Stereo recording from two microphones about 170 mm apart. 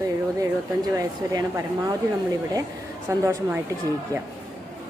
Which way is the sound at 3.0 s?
20° right (ahead or behind).